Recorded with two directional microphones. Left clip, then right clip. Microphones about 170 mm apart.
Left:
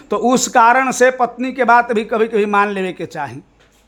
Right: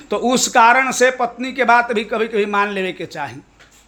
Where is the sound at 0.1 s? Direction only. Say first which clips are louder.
Left 2 dB; 35° left (ahead or behind).